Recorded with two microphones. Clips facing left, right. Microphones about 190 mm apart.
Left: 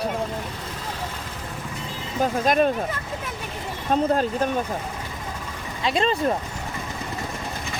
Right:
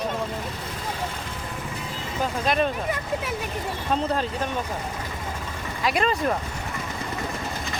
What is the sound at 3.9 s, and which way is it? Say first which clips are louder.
Speech: left 5 dB; 45° left (ahead or behind).